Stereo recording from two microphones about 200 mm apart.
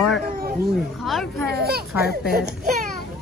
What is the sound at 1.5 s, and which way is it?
Speech, 50° right (ahead or behind).